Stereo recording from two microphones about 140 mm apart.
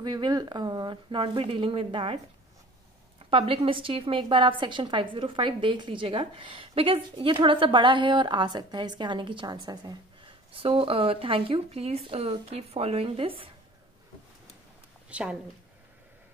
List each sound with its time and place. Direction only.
0.0 s a woman's voice: 30° right (ahead or behind)
3.3 s a woman's voice: 40° right (ahead or behind)
15.0 s a woman's voice: 10° right (ahead or behind)